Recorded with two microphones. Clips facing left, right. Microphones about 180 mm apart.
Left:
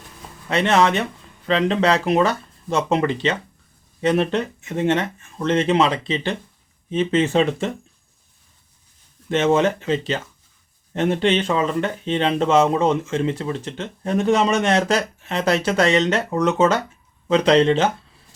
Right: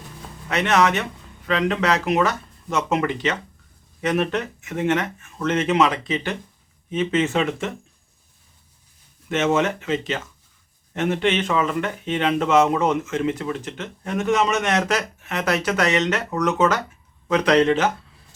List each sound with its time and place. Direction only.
0.4 s speech: 30° left (ahead or behind)
9.3 s speech: 30° left (ahead or behind)